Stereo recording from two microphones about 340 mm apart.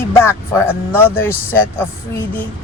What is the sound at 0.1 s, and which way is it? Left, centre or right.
Speech, centre.